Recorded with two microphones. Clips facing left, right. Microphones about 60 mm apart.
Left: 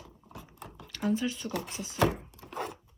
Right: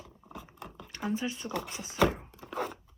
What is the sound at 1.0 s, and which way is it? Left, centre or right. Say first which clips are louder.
Speech: left 3 dB; right.